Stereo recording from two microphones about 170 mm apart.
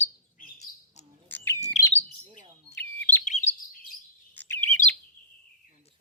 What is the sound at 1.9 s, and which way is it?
Bird, 40° left (ahead or behind).